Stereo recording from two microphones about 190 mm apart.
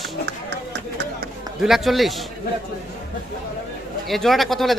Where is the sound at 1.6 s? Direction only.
Centre (ahead or behind).